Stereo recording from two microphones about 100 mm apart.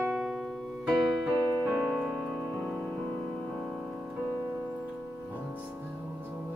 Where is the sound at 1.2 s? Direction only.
10° right (ahead or behind).